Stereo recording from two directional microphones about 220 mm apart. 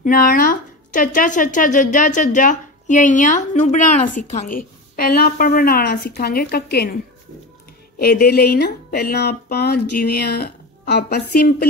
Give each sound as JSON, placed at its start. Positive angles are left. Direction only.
{"t": 0.0, "sound": "speech", "side_deg": 40}
{"t": 8.0, "sound": "speech", "side_deg": 45}